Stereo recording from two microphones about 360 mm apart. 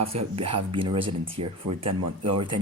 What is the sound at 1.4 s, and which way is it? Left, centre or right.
Speech, right.